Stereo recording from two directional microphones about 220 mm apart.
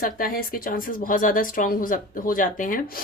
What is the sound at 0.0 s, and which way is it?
Speech, 40° left (ahead or behind).